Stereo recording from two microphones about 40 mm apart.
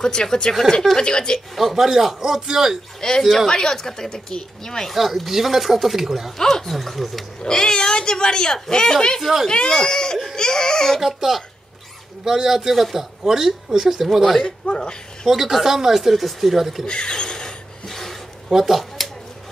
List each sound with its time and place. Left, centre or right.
0.0 s speech: centre
1.5 s speech: centre
3.0 s speech: centre
4.9 s speech: centre
6.3 s speech: centre
7.4 s speech: centre
11.0 s speech: centre
16.8 s a sound: left
17.8 s a sound: centre
18.5 s speech: centre